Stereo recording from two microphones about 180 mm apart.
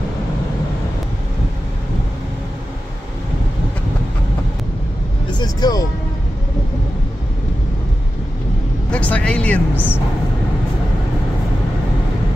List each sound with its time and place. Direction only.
5.4 s music: 20° left (ahead or behind)
8.9 s vehicle: 5° left (ahead or behind)